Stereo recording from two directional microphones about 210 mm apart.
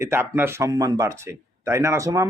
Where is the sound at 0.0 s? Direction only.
10° right (ahead or behind).